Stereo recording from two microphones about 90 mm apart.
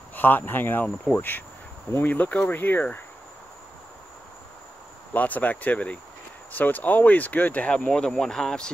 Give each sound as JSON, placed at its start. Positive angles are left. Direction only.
{"t": 0.1, "sound": "speech", "side_deg": 20}
{"t": 5.1, "sound": "speech", "side_deg": 20}